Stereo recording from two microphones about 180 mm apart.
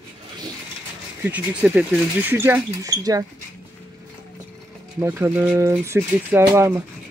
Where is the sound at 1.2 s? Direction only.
10° right (ahead or behind).